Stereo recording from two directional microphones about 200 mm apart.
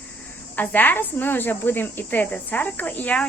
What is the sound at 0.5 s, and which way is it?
Speech, 10° left (ahead or behind).